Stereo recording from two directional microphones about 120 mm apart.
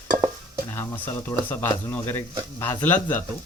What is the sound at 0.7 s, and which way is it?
Speech, 15° left (ahead or behind).